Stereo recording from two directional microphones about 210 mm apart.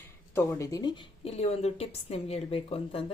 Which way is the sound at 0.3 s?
15° left (ahead or behind).